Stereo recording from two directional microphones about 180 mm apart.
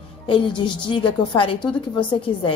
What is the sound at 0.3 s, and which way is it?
A woman's voice, 25° left (ahead or behind).